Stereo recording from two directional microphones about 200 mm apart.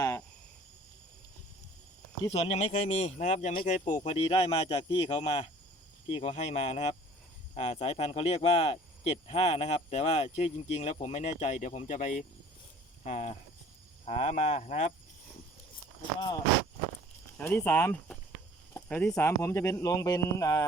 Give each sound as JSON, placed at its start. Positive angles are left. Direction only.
{"t": 2.3, "sound": "speech", "side_deg": 30}
{"t": 17.3, "sound": "speech", "side_deg": 10}